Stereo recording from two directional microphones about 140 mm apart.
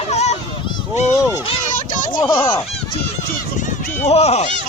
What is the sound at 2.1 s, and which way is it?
Speech, 25° left (ahead or behind).